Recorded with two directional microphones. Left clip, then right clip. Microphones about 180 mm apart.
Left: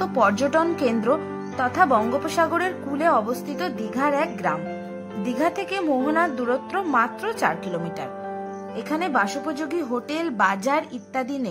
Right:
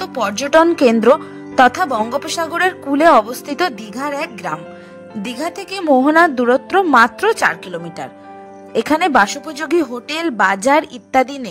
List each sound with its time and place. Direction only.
0.4 s a woman's voice: 40° right (ahead or behind)
3.9 s a woman's voice: centre (ahead or behind)
5.7 s a woman's voice: 35° right (ahead or behind)
8.7 s a woman's voice: 40° right (ahead or behind)